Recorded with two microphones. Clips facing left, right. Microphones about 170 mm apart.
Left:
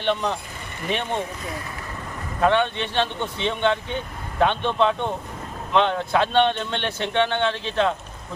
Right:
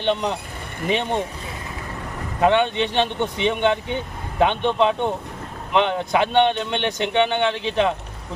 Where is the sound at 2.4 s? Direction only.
15° right (ahead or behind).